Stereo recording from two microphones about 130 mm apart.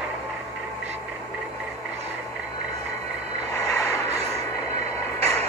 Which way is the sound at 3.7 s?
25° left (ahead or behind).